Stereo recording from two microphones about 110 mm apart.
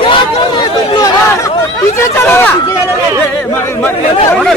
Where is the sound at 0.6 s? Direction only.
40° left (ahead or behind); by 4.4 s 15° left (ahead or behind).